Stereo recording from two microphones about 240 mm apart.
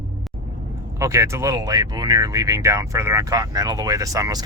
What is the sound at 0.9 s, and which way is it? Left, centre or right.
Speech, centre.